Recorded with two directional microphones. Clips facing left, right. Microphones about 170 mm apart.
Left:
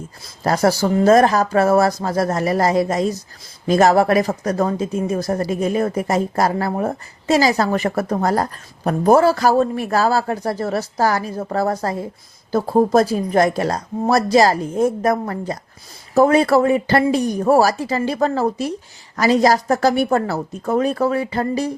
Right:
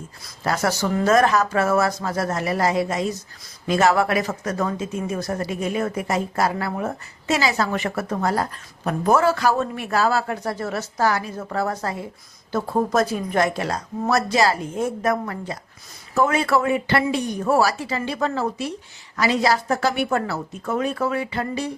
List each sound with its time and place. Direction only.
0.4 s speech: 35° left (ahead or behind)